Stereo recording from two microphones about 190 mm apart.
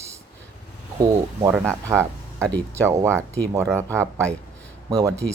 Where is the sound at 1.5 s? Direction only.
10° right (ahead or behind).